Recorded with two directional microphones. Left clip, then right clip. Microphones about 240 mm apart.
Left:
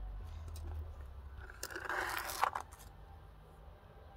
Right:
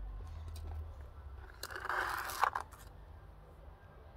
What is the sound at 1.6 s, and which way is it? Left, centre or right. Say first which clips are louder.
Scrape: right 2 dB; centre.